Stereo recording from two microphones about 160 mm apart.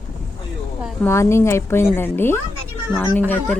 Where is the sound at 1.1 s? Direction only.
15° left (ahead or behind).